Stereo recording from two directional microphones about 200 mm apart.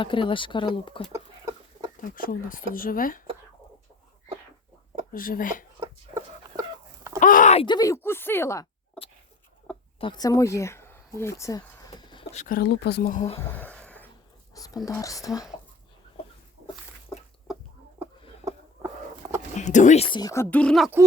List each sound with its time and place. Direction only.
0.0 s speech: 25° left (ahead or behind)
2.0 s speech: 45° left (ahead or behind)
5.1 s speech: 45° left (ahead or behind)
5.8 s chicken: 15° right (ahead or behind)
7.2 s speech: 40° left (ahead or behind); by 8.6 s 15° left (ahead or behind)
10.0 s speech: 20° left (ahead or behind)
12.3 s speech: 40° left (ahead or behind)
13.5 s a sound: 5° left (ahead or behind)
14.5 s dog: 15° left (ahead or behind)
14.8 s speech: 15° left (ahead or behind)
18.0 s a sound: 15° right (ahead or behind)
19.5 s speech: 35° left (ahead or behind)
20.1 s speech: 20° left (ahead or behind); by 20.9 s centre (ahead or behind)